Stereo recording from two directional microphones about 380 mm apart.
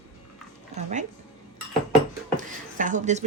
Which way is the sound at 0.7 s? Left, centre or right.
Centre.